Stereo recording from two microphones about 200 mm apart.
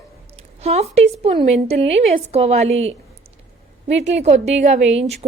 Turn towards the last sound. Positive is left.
turn(degrees=-30)  # may be behind; listen again after turning